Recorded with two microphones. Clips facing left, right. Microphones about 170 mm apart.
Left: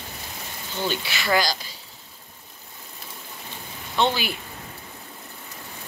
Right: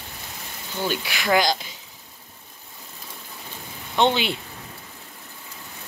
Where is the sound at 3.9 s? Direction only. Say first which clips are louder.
Right 3 dB; 20° right (ahead or behind).